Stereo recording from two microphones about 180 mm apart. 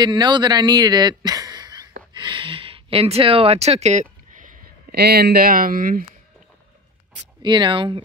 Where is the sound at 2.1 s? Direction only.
25° right (ahead or behind); by 4.5 s 45° right (ahead or behind).